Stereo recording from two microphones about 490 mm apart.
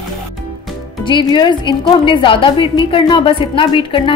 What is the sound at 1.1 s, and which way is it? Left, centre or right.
A woman's voice, centre.